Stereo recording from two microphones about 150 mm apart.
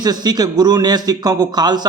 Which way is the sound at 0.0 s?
25° right (ahead or behind).